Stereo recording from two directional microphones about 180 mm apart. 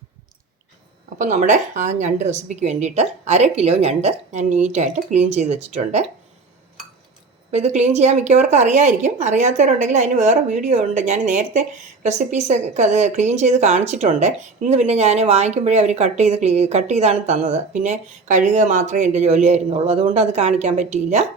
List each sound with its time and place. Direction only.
1.2 s a woman's voice: 45° right (ahead or behind)
7.5 s a woman's voice: 40° right (ahead or behind)